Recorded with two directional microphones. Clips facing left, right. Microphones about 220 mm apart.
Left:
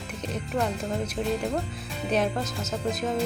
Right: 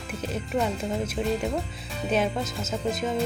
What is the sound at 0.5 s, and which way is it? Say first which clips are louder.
Music: right 1 dB; centre (ahead or behind).